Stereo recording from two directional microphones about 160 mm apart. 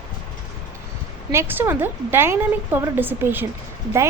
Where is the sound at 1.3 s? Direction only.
15° right (ahead or behind).